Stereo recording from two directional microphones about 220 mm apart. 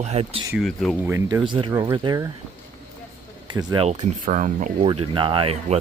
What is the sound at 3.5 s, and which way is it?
Speech, 25° right (ahead or behind).